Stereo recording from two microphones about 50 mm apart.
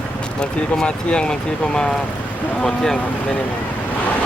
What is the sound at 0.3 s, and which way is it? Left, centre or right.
Speech, centre.